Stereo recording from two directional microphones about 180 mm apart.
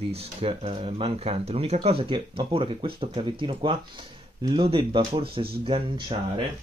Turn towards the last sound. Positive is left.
turn(degrees=-30)  # may be behind; listen again after turning